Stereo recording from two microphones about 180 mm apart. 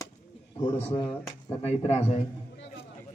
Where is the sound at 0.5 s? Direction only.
15° left (ahead or behind).